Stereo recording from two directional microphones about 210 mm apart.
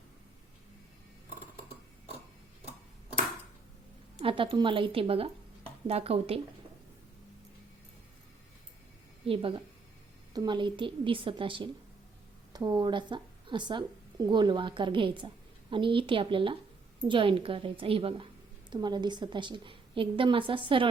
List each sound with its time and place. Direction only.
4.2 s speech: 25° right (ahead or behind)
9.2 s speech: 25° right (ahead or behind)